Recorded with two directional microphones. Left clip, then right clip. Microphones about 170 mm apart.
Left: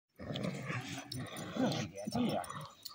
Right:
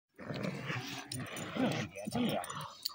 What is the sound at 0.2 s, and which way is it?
Roar, 15° right (ahead or behind).